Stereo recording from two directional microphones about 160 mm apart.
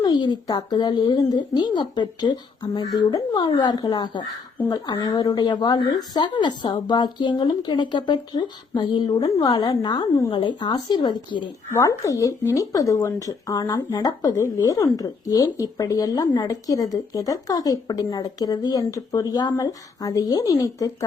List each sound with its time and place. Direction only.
0.0 s speech: 25° left (ahead or behind)
11.7 s speech: 20° left (ahead or behind)